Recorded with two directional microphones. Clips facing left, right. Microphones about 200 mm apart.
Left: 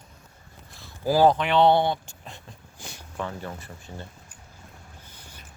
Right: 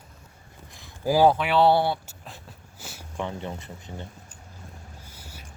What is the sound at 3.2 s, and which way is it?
Speech, 20° right (ahead or behind).